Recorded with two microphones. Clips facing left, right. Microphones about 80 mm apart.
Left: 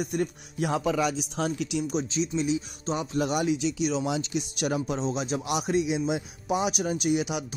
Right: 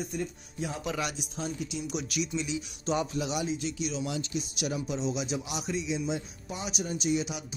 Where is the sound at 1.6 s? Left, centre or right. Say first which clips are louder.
Left 6 dB; left.